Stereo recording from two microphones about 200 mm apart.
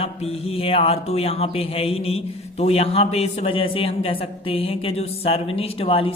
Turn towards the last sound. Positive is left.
turn(degrees=25)  # may be behind; listen again after turning